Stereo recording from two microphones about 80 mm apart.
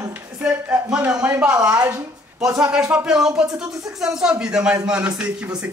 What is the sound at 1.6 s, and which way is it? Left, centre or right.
Speech, right.